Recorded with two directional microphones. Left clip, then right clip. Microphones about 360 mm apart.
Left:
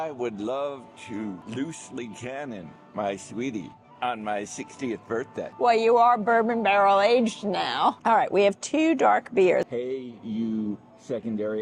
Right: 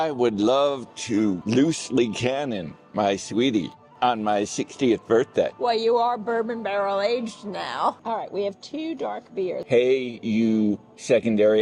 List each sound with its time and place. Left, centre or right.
0.0 s speech: right
2.9 s speech: right
4.0 s speech: right
5.5 s a man's voice: centre
8.0 s speech: left
9.6 s speech: right